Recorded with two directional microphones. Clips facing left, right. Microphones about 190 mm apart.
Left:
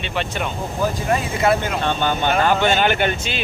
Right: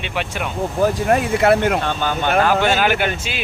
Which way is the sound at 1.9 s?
Centre (ahead or behind).